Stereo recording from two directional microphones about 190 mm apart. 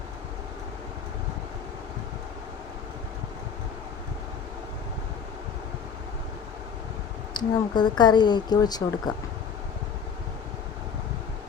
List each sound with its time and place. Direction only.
7.3 s speech: 20° left (ahead or behind)